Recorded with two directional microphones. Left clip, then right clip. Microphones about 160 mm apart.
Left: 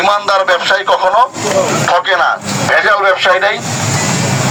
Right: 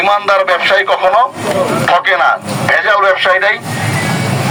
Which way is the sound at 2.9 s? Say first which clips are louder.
Right 1 dB; 5° right (ahead or behind).